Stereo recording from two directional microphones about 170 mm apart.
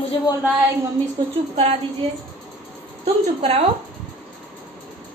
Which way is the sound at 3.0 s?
40° right (ahead or behind).